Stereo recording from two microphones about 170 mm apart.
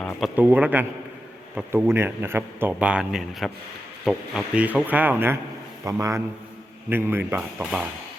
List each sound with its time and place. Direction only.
0.2 s a man's voice: 10° right (ahead or behind)